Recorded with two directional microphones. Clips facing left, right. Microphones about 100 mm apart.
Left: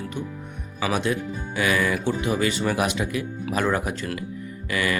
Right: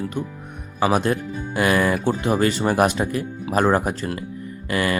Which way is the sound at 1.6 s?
45° right (ahead or behind).